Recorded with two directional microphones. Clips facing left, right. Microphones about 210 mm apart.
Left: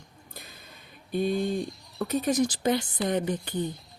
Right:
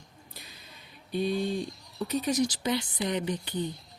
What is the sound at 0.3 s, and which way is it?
Speech, 50° left (ahead or behind).